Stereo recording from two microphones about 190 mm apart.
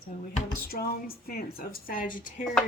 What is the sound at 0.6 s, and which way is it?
Music, 55° left (ahead or behind).